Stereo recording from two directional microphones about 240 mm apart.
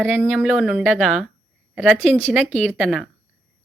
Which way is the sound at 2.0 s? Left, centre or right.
Right.